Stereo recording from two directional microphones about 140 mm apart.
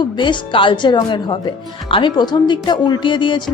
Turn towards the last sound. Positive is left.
turn(degrees=35)  # may be behind; listen again after turning